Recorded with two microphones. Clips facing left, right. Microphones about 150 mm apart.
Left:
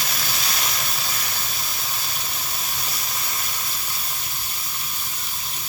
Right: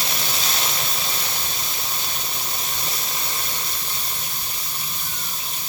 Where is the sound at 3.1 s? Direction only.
25° right (ahead or behind).